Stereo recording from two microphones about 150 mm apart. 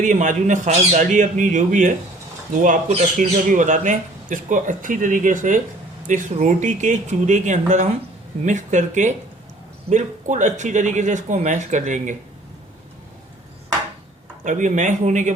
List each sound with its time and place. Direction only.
0.0 s speech: 55° right (ahead or behind)
14.4 s speech: 55° right (ahead or behind)